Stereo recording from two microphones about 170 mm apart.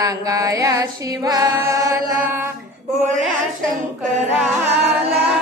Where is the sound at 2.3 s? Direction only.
15° right (ahead or behind).